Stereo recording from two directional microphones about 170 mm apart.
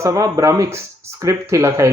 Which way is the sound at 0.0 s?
20° right (ahead or behind).